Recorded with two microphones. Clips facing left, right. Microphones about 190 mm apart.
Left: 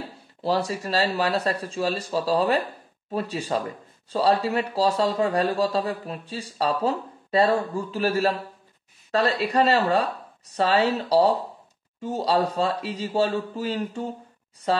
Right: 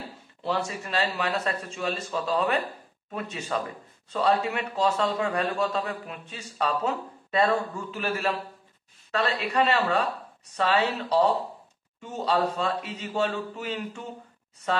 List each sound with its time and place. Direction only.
0.4 s speech: 35° left (ahead or behind)